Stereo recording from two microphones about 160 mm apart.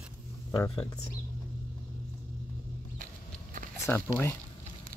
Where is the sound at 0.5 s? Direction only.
25° left (ahead or behind).